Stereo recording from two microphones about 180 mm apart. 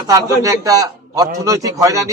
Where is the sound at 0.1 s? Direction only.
20° right (ahead or behind).